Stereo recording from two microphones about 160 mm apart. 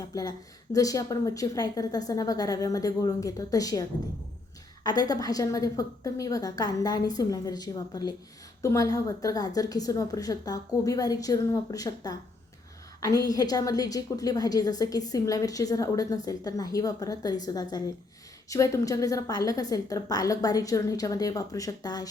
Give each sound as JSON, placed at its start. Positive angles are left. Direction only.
{"t": 0.0, "sound": "a woman's voice", "side_deg": 20}